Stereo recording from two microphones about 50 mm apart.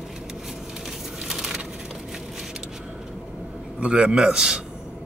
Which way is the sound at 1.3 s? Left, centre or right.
Centre.